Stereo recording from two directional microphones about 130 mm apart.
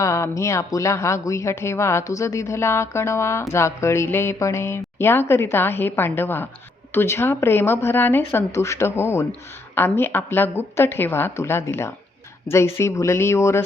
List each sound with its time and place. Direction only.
0.0 s a woman's voice: 25° left (ahead or behind)